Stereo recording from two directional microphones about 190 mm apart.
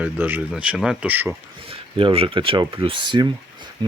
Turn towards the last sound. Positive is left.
turn(degrees=-20)  # may be behind; listen again after turning